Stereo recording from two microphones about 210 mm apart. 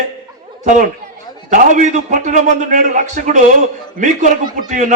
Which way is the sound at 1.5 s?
35° right (ahead or behind).